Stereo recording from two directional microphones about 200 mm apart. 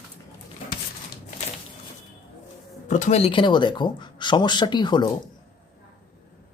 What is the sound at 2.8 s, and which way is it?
Speech, 35° left (ahead or behind).